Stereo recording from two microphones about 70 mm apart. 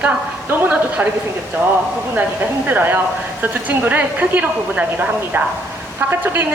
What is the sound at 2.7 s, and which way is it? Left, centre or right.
A woman's voice, right.